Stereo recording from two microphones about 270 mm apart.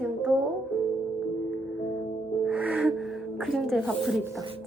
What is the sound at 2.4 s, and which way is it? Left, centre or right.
Music, centre.